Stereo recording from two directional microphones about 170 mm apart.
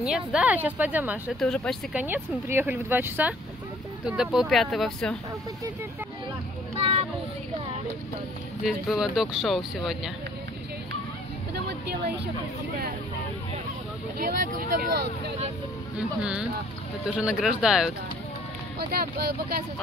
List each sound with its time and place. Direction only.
0.0 s speech: 5° right (ahead or behind)
1.4 s speech: 5° left (ahead or behind)
2.0 s speech: 10° right (ahead or behind)
6.8 s a child's voice: 35° right (ahead or behind)
8.6 s speech: 5° right (ahead or behind)
14.1 s speech: 55° right (ahead or behind)
16.0 s speech: 5° right (ahead or behind)
18.8 s speech: 65° right (ahead or behind)